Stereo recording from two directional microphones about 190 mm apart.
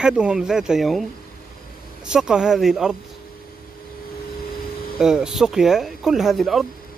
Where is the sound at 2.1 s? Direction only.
5° right (ahead or behind).